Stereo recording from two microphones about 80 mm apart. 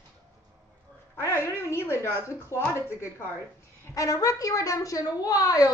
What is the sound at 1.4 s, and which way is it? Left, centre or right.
A woman's voice, left.